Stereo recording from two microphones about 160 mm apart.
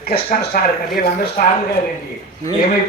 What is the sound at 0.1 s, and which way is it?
Speech, 70° left (ahead or behind).